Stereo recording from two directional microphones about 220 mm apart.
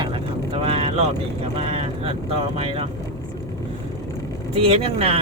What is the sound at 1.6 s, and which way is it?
Vehicle, 25° right (ahead or behind).